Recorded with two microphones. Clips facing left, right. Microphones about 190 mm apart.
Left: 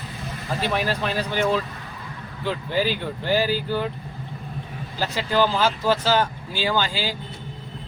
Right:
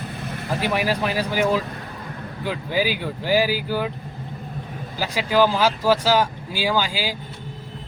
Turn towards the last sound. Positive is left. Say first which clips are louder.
# right 1 dB
turn(degrees=-10)  # may be behind; listen again after turning